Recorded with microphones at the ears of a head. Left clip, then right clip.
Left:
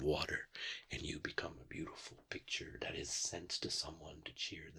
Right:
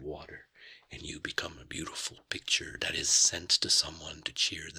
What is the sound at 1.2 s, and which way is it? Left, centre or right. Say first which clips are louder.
Speech: right 7 dB; right.